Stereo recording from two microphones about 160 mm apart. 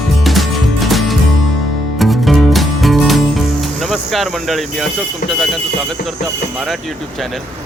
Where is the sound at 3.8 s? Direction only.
Centre (ahead or behind).